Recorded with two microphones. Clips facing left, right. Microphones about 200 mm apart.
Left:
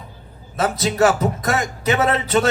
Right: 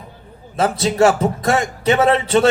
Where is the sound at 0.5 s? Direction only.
30° right (ahead or behind).